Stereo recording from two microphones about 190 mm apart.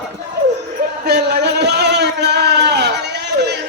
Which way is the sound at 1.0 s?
60° right (ahead or behind).